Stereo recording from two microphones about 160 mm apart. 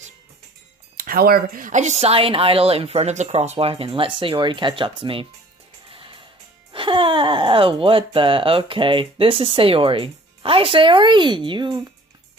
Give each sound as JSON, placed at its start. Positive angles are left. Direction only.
{"t": 0.9, "sound": "a woman's voice", "side_deg": -60}
{"t": 5.9, "sound": "music", "side_deg": -35}
{"t": 6.7, "sound": "speech", "side_deg": -30}